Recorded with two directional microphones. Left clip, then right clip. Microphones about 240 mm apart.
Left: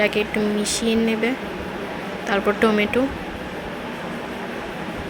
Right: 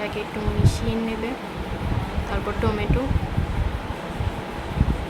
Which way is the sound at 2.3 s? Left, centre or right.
Centre.